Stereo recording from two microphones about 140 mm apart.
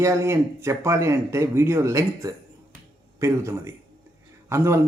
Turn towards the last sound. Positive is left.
turn(degrees=-20)  # may be behind; listen again after turning